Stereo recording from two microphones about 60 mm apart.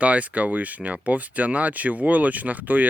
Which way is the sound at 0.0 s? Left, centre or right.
Right.